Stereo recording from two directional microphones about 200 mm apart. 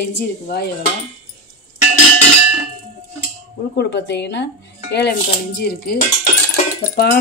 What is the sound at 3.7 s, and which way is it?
Speech, 60° left (ahead or behind).